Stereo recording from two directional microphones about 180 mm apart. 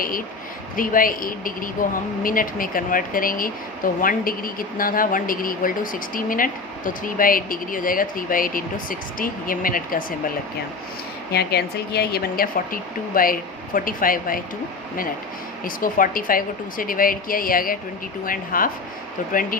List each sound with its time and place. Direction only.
0.0 s speech: 50° left (ahead or behind)
11.3 s a woman's voice: 65° left (ahead or behind)
15.6 s speech: 50° left (ahead or behind)